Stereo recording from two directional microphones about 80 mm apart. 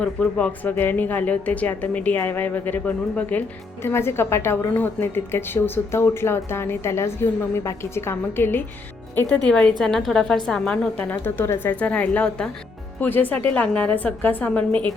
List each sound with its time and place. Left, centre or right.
0.0 s speech: centre
3.8 s a woman's voice: left
9.1 s a woman's voice: centre
11.2 s speech: left
11.8 s a woman's voice: centre